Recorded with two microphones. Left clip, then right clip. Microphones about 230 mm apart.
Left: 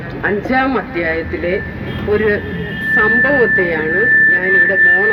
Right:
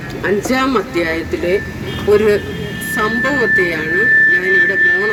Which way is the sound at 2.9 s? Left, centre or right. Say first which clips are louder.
Left 5 dB; right.